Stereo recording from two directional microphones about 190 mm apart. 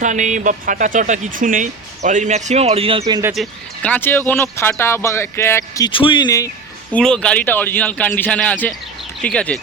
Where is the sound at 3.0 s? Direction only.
20° right (ahead or behind).